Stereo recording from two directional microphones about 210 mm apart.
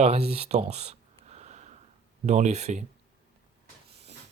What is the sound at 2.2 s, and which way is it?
Speech, 35° right (ahead or behind).